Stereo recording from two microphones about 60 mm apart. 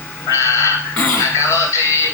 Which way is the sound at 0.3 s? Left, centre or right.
Left.